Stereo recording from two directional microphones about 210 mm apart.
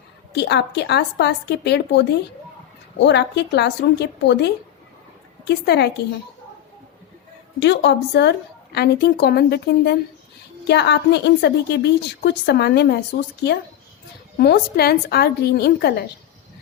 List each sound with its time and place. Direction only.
0.3 s a woman's voice: 55° left (ahead or behind)
3.1 s a woman's voice: 55° left (ahead or behind)
7.6 s a woman's voice: 55° left (ahead or behind)
14.3 s a woman's voice: 50° left (ahead or behind)